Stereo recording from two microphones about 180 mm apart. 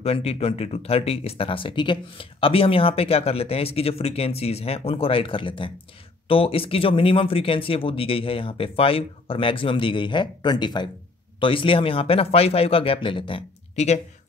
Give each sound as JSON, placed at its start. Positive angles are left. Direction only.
{"t": 0.0, "sound": "speech", "side_deg": 35}